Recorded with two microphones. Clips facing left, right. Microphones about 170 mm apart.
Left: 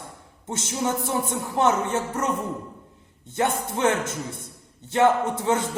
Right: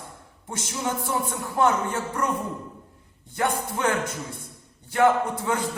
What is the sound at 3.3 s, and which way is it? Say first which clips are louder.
A man's voice: left 1 dB; 25° left (ahead or behind).